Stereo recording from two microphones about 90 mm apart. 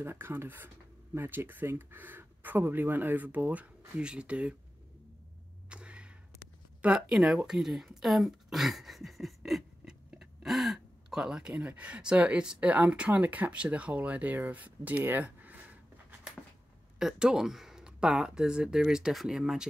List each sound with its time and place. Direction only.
0.0 s speech: 25° right (ahead or behind)
5.7 s a sound: 10° right (ahead or behind)
6.8 s speech: 10° right (ahead or behind)
17.0 s speech: 5° right (ahead or behind)